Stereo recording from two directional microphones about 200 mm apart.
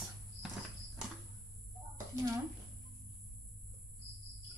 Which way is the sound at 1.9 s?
15° right (ahead or behind).